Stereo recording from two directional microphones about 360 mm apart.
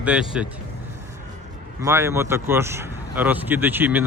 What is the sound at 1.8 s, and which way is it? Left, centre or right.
Speech, centre.